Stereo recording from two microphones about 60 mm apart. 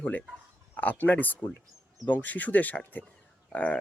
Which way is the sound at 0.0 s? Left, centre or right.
Left.